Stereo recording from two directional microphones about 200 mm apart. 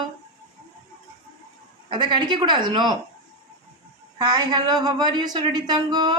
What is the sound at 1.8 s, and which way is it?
A woman's voice, 25° right (ahead or behind).